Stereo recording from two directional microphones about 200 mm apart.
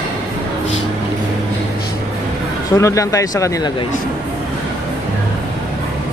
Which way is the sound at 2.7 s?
15° left (ahead or behind).